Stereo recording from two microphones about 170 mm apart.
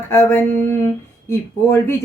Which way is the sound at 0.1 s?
15° left (ahead or behind).